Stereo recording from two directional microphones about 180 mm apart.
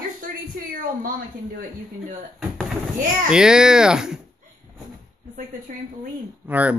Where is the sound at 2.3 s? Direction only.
Centre (ahead or behind).